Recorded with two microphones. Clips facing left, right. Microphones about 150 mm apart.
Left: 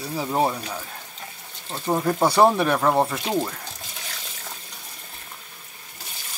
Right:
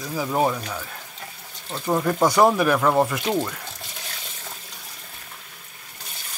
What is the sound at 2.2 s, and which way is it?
Speech, 30° left (ahead or behind).